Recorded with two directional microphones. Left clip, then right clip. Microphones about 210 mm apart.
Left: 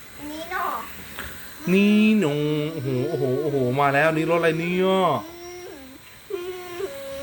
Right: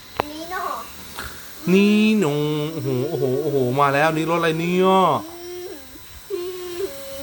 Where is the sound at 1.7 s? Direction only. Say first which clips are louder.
Right 2 dB; 15° right (ahead or behind).